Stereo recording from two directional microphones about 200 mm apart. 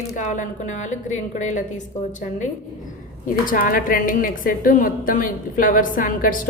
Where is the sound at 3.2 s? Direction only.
45° left (ahead or behind).